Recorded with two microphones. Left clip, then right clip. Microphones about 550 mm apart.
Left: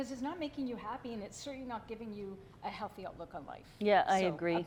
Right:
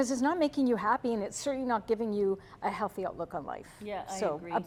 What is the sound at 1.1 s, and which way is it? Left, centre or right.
A woman's voice, right.